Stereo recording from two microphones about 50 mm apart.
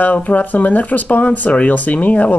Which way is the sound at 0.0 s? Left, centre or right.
Left.